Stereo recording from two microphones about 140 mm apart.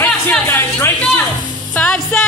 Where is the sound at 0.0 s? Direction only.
15° left (ahead or behind).